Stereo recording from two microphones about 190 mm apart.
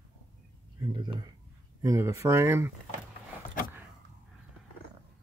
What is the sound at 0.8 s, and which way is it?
Speech, 25° right (ahead or behind).